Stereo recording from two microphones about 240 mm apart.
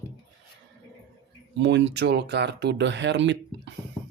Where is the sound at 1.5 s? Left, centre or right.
Right.